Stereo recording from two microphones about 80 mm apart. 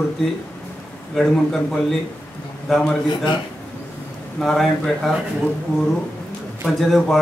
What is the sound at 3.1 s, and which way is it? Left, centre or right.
Speech, left.